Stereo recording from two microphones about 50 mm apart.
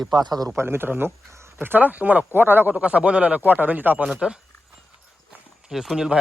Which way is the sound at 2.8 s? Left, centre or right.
Right.